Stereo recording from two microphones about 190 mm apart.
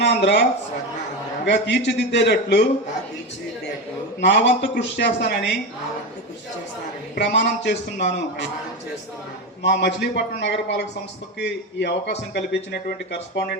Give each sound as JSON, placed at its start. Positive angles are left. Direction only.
{"t": 0.0, "sound": "a man's voice", "side_deg": 65}
{"t": 1.5, "sound": "speech", "side_deg": 65}
{"t": 4.2, "sound": "speech", "side_deg": 65}
{"t": 7.2, "sound": "a man's voice", "side_deg": 70}
{"t": 9.6, "sound": "speech", "side_deg": 65}